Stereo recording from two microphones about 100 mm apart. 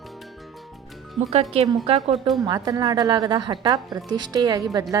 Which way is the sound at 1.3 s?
90° right.